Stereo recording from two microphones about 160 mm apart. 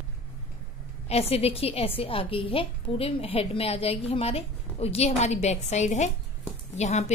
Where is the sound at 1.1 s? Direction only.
40° left (ahead or behind).